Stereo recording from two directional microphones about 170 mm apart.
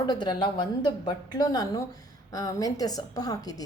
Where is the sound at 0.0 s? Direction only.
25° left (ahead or behind).